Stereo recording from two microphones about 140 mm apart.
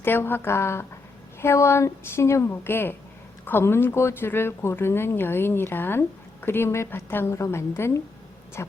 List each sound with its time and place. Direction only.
0.0 s speech: 15° left (ahead or behind)